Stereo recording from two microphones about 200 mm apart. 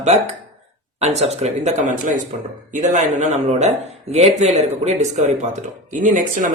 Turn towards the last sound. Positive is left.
turn(degrees=-40)  # may be behind; listen again after turning